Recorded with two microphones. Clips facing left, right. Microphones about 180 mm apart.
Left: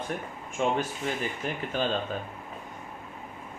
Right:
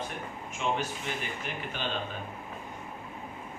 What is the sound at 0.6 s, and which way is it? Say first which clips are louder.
Speech: left 4 dB; 50° left (ahead or behind).